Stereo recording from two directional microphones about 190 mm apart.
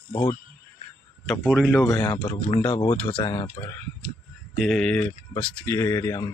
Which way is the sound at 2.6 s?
10° left (ahead or behind).